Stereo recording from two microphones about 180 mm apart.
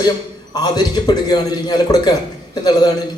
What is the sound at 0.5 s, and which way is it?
A man's voice, 20° left (ahead or behind).